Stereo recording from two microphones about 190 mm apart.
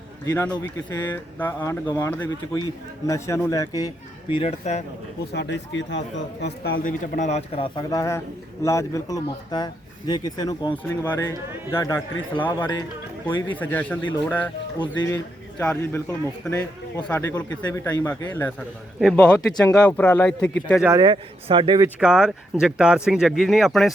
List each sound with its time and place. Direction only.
0.3 s a man's voice: 15° left (ahead or behind); by 4.8 s 35° left (ahead or behind)
5.3 s speech: 65° left (ahead or behind)
6.4 s a man's voice: 55° left (ahead or behind); by 20.5 s 10° left (ahead or behind)
21.0 s speech: 25° right (ahead or behind)
22.0 s speech: 5° right (ahead or behind)